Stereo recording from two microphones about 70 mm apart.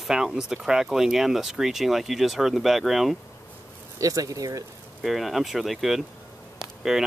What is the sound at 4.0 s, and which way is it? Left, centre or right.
Speech, right.